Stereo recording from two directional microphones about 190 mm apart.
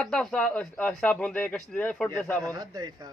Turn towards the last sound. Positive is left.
turn(degrees=-20)  # may be behind; listen again after turning